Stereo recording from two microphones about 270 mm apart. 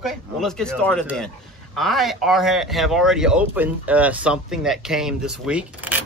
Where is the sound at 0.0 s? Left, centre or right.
Centre.